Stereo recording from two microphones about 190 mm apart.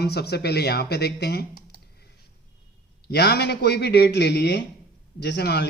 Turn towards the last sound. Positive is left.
turn(degrees=60)  # may be behind; listen again after turning